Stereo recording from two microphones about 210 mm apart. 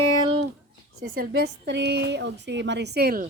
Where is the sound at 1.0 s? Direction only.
45° right (ahead or behind).